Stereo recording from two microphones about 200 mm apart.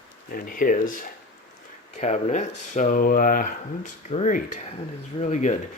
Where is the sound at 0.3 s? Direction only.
45° left (ahead or behind).